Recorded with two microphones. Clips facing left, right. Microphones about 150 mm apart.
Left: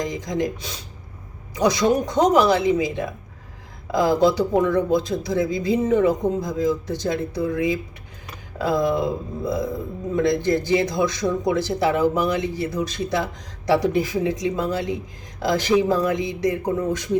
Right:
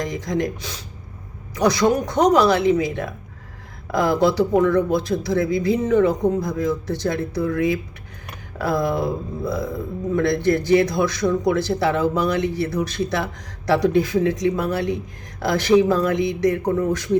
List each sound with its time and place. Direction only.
0.0 s speech: 20° left (ahead or behind)